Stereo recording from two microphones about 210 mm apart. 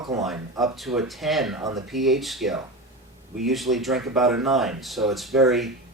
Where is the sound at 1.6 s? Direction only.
20° right (ahead or behind).